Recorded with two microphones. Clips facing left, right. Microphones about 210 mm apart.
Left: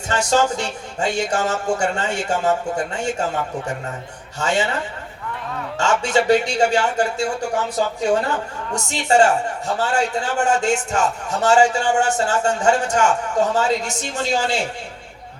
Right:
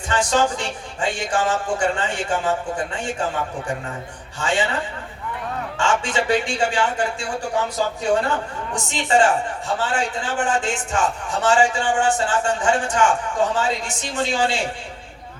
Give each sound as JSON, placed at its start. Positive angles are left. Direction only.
{"t": 0.1, "sound": "speech", "side_deg": 40}
{"t": 4.4, "sound": "speech", "side_deg": 40}
{"t": 5.7, "sound": "speech", "side_deg": 40}
{"t": 8.7, "sound": "speech", "side_deg": 40}